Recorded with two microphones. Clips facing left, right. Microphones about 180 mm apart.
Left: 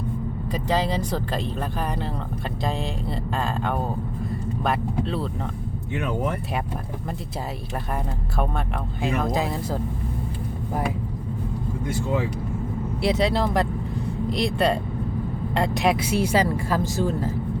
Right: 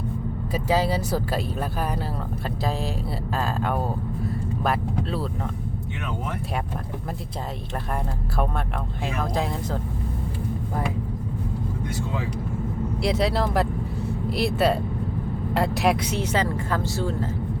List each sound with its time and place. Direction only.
0.5 s speech: 10° right (ahead or behind)
3.3 s speech: 5° right (ahead or behind)
9.0 s speech: centre (ahead or behind)
13.0 s speech: centre (ahead or behind); by 17.2 s 15° left (ahead or behind)